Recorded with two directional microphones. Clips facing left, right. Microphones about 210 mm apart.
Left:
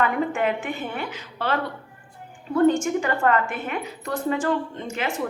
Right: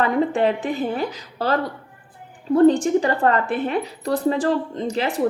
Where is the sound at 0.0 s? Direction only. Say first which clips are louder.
Right 4 dB; 35° right (ahead or behind).